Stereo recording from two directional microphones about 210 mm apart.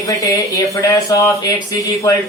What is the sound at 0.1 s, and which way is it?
Speech, 15° left (ahead or behind).